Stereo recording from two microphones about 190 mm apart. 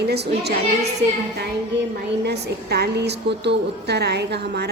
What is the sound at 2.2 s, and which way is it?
A woman's voice, 60° right (ahead or behind).